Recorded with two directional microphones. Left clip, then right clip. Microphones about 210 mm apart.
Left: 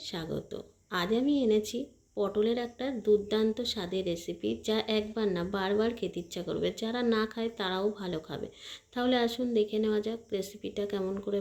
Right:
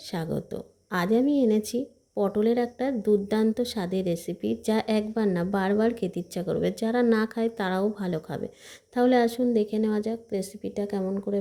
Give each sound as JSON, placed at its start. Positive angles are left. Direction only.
{"t": 0.1, "sound": "a woman's voice", "side_deg": -35}